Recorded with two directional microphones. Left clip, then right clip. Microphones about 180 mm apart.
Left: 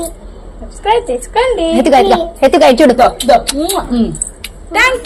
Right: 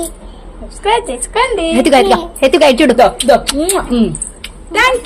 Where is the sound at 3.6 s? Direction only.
50° right (ahead or behind).